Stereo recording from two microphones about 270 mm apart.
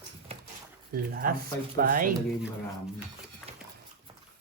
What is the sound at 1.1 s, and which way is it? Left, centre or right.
Speech, right.